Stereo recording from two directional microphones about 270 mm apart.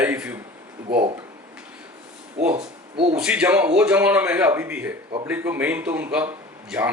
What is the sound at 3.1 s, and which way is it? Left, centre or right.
A man's voice, centre.